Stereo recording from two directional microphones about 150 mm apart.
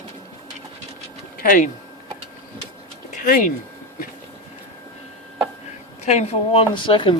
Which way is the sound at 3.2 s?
65° left (ahead or behind).